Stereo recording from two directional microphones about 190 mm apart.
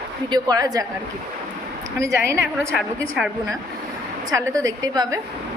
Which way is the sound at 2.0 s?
15° right (ahead or behind).